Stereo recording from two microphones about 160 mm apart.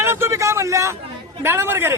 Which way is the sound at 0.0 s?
15° right (ahead or behind).